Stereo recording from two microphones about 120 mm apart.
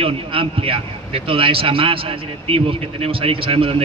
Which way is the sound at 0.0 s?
50° right (ahead or behind).